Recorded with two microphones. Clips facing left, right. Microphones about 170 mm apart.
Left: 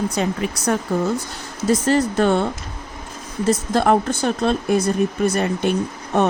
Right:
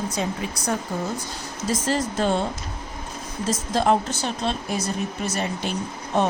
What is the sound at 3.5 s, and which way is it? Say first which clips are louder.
Speech: left 4 dB; 60° left (ahead or behind).